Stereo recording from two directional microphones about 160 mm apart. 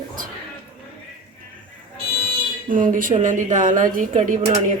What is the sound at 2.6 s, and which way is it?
Speech, 55° right (ahead or behind).